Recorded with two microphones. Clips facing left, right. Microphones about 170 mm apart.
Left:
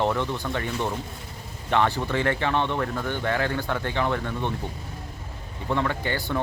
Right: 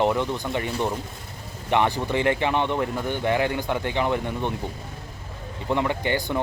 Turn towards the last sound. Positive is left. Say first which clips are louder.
# right 3 dB
turn(degrees=-15)  # may be behind; listen again after turning